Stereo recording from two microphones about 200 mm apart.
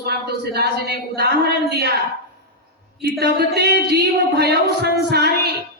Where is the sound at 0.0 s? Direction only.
55° right (ahead or behind).